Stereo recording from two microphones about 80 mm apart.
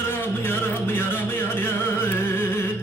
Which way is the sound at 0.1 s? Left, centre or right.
Left.